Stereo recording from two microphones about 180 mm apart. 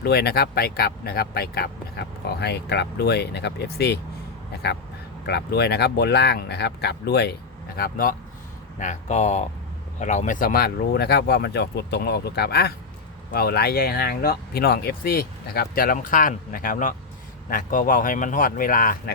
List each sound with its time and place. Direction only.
0.0 s speech: 65° left (ahead or behind)
5.2 s speech: 65° left (ahead or behind)
7.8 s speech: 55° left (ahead or behind)
8.8 s speech: 40° left (ahead or behind)